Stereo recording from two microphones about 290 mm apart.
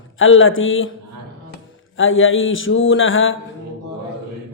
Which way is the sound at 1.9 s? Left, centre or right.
Left.